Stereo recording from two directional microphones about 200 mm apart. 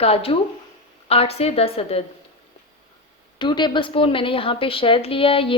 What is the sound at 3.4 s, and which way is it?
A woman's voice, 20° left (ahead or behind).